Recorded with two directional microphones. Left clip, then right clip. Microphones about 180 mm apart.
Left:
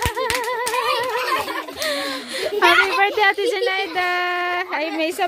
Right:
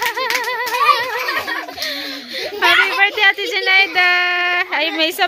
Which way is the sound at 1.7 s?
45° left (ahead or behind).